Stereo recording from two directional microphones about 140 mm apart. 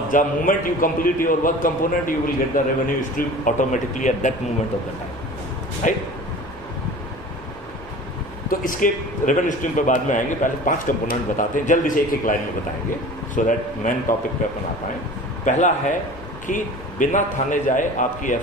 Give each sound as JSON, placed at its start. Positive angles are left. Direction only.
{"t": 0.1, "sound": "a man's voice", "side_deg": 80}
{"t": 5.8, "sound": "a man's voice", "side_deg": 65}
{"t": 8.5, "sound": "a man's voice", "side_deg": 75}
{"t": 15.4, "sound": "a man's voice", "side_deg": 65}